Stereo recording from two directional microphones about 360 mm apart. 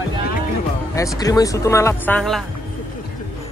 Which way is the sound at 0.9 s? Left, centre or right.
Centre.